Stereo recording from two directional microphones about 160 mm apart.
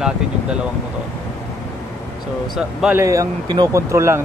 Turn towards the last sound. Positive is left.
turn(degrees=-15)  # may be behind; listen again after turning